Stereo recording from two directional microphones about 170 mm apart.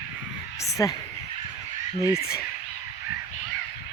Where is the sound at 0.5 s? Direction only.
20° left (ahead or behind).